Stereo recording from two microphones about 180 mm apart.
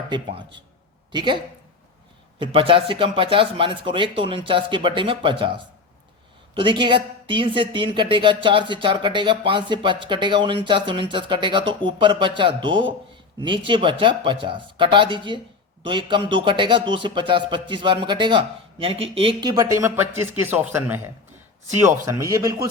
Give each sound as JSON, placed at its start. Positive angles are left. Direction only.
{"t": 0.1, "sound": "a woman's voice", "side_deg": -25}
{"t": 2.4, "sound": "a woman's voice", "side_deg": -30}
{"t": 19.5, "sound": "speech", "side_deg": -15}